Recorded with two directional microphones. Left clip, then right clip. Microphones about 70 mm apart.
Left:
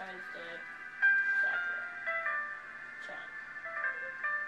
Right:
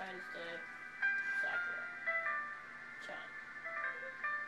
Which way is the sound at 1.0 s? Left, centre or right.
Left.